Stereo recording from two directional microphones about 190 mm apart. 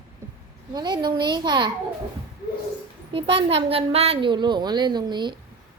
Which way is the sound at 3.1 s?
30° right (ahead or behind).